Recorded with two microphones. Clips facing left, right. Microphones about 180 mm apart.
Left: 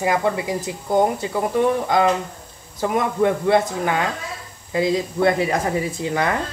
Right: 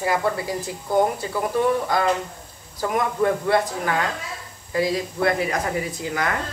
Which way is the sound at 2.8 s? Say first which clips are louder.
Left 2 dB; 20° left (ahead or behind).